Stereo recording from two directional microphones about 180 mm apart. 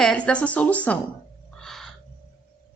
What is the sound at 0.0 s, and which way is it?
Speech, 5° left (ahead or behind).